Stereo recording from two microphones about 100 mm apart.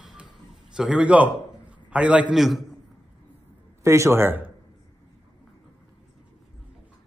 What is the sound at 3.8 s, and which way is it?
Speech, 30° right (ahead or behind).